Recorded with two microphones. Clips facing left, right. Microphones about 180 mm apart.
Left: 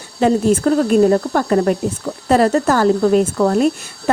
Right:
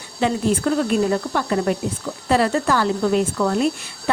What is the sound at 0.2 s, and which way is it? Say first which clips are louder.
Speech: left 6 dB; 45° left (ahead or behind).